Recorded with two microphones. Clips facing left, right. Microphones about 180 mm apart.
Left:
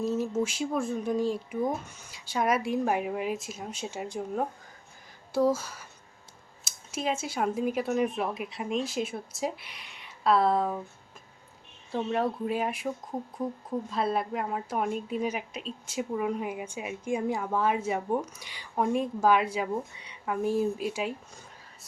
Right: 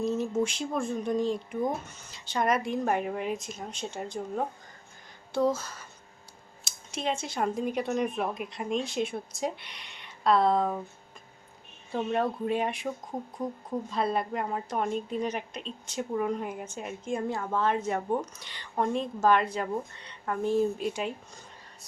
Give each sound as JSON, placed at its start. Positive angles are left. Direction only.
{"t": 0.0, "sound": "a woman's voice", "side_deg": 5}
{"t": 11.9, "sound": "a woman's voice", "side_deg": 0}